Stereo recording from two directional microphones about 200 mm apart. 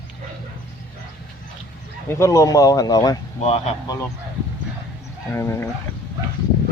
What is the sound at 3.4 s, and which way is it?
Speech, 35° left (ahead or behind).